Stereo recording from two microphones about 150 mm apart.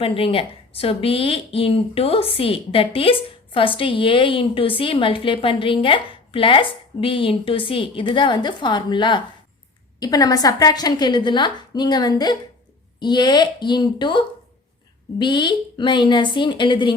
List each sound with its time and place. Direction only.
0.0 s a woman's voice: 40° left (ahead or behind)